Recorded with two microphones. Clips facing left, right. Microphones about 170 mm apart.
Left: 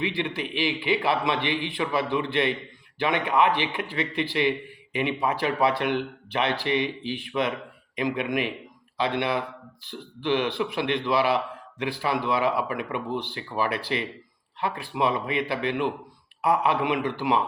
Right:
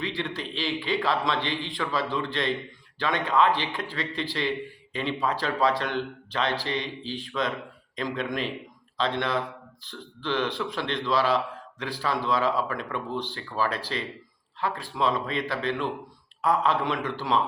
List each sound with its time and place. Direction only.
0.0 s a man's voice: 15° left (ahead or behind)